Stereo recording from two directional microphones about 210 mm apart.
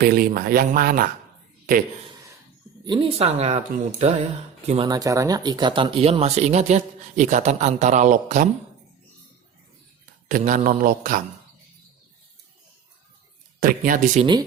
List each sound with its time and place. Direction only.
0.0 s speech: 45° right (ahead or behind)
2.8 s speech: 25° right (ahead or behind)
10.2 s speech: 40° right (ahead or behind)
13.6 s speech: 40° right (ahead or behind)